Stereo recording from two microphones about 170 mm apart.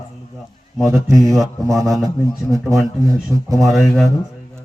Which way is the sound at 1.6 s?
20° right (ahead or behind).